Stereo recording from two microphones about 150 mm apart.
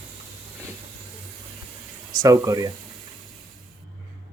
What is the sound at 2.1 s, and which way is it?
Speech, 25° right (ahead or behind).